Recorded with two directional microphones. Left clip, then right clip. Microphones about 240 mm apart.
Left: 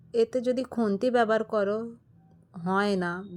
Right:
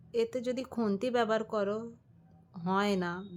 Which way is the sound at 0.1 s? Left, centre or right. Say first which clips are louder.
Left 7 dB; centre.